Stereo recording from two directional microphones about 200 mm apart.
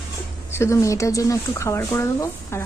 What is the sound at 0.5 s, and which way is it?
Speech, 15° left (ahead or behind).